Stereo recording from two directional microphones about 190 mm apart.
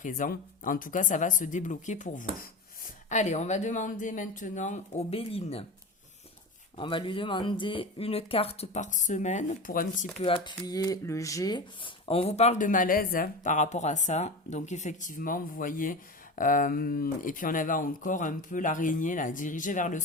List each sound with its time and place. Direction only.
0.0 s speech: 45° left (ahead or behind)
6.7 s speech: 25° left (ahead or behind); by 10.1 s 45° left (ahead or behind)
10.2 s speech: 30° left (ahead or behind)